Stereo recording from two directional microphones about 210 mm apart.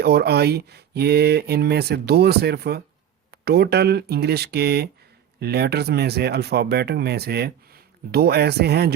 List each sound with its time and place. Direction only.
0.0 s speech: 50° right (ahead or behind)